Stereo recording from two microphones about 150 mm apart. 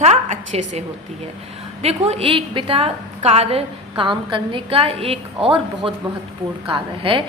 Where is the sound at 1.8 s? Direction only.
45° right (ahead or behind).